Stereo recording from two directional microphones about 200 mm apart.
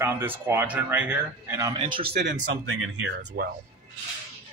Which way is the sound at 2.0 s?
55° right (ahead or behind).